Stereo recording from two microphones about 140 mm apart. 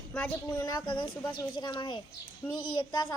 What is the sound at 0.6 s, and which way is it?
A child's voice, 30° left (ahead or behind).